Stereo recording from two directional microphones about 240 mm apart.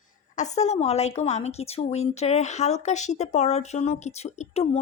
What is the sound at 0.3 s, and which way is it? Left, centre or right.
A woman's voice, left.